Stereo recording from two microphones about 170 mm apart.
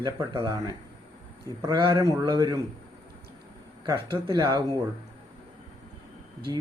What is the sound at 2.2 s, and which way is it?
Speech, 25° right (ahead or behind).